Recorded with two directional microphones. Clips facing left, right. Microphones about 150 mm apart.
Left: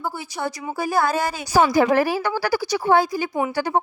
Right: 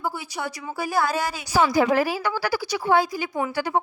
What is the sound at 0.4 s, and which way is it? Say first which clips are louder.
A woman's voice: left 6 dB; 45° left (ahead or behind).